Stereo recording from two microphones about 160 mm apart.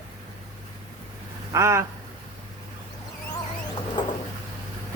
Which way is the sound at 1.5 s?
20° right (ahead or behind).